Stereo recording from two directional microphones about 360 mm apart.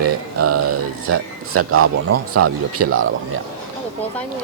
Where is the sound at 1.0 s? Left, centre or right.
Right.